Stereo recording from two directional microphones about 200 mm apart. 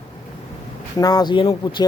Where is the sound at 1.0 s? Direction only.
20° left (ahead or behind).